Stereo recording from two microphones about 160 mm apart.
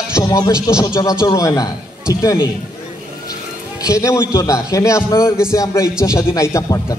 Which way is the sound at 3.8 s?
20° left (ahead or behind).